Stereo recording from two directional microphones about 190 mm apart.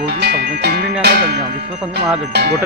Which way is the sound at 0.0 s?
60° right (ahead or behind).